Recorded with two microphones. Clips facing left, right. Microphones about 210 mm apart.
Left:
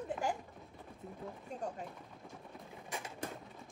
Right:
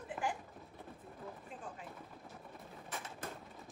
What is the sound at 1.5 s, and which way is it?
Machine gun, 40° left (ahead or behind).